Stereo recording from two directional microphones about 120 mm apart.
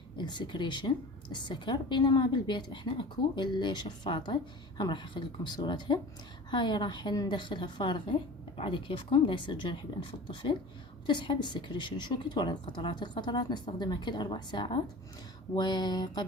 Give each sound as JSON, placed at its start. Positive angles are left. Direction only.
{"t": 0.2, "sound": "a woman's voice", "side_deg": 40}